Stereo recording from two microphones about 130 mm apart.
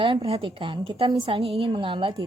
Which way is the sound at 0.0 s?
40° right (ahead or behind).